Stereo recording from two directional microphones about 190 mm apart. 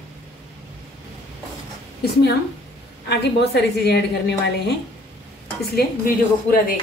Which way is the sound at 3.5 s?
60° left (ahead or behind).